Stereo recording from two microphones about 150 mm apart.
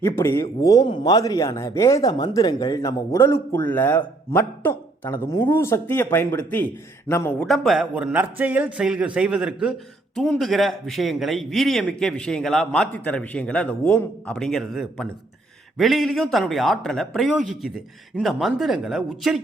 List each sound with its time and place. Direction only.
0.0 s speech: 20° left (ahead or behind)
7.4 s a man's voice: centre (ahead or behind)